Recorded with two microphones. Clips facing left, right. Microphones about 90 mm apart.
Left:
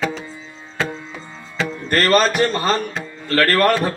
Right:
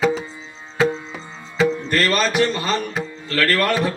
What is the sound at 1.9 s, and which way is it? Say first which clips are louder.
Music: left 4 dB; 40° left (ahead or behind).